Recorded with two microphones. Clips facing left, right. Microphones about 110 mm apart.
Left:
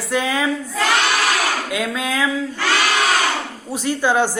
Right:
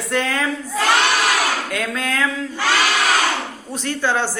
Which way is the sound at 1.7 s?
5° left (ahead or behind).